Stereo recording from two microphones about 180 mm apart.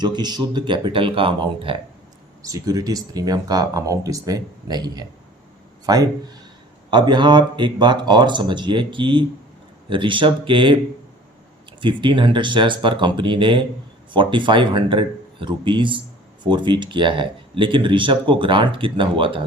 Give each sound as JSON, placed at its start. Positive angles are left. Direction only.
{"t": 0.0, "sound": "speech", "side_deg": -25}
{"t": 11.8, "sound": "speech", "side_deg": -25}